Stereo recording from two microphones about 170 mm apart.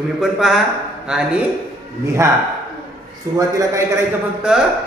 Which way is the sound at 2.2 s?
20° right (ahead or behind).